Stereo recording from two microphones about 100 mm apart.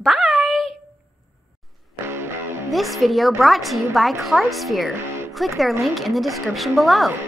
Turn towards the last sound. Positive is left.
turn(degrees=0)  # may be behind; listen again after turning